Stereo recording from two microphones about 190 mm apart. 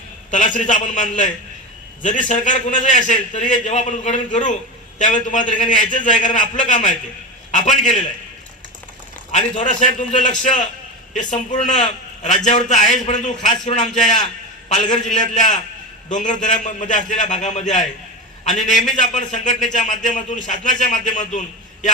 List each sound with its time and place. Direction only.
0.3 s a man's voice: 40° left (ahead or behind)
9.3 s a man's voice: 40° left (ahead or behind)